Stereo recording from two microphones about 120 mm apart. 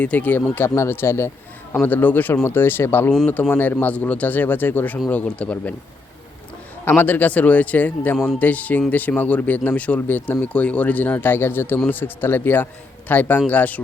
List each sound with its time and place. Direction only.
0.0 s a man's voice: 15° left (ahead or behind)
6.8 s a man's voice: 15° left (ahead or behind)